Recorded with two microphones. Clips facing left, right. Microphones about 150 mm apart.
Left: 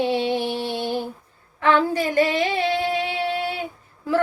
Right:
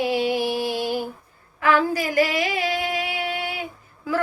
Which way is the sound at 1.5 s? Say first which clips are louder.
Left 1 dB; 25° left (ahead or behind).